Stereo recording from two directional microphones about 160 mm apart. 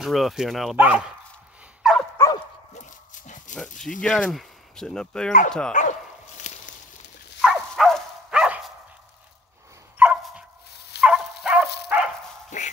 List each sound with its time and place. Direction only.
0.0 s speech: centre (ahead or behind)
1.8 s dog: 5° right (ahead or behind)
2.1 s dog: 20° left (ahead or behind)
3.5 s speech: 5° left (ahead or behind)
5.7 s dog: 50° left (ahead or behind)
7.4 s dog: centre (ahead or behind)
9.9 s dog: 10° right (ahead or behind)
12.5 s a sound: 45° left (ahead or behind)